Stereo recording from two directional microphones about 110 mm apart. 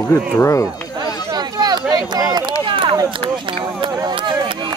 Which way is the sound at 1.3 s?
40° right (ahead or behind).